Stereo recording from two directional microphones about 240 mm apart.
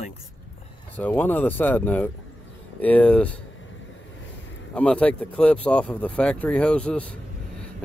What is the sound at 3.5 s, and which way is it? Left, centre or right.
Vehicle, left.